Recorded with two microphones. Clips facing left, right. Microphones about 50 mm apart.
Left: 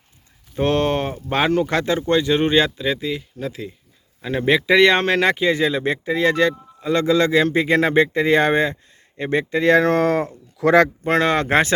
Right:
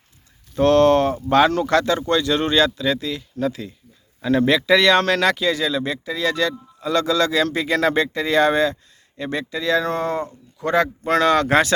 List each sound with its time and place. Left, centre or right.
0.5 s speech: centre; by 10.8 s left
11.0 s speech: left